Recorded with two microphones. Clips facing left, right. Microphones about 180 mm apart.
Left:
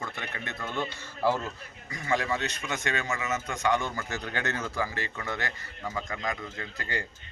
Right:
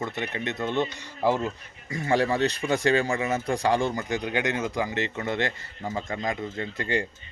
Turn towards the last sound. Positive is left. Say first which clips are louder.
# right 8 dB
turn(degrees=-25)  # may be behind; listen again after turning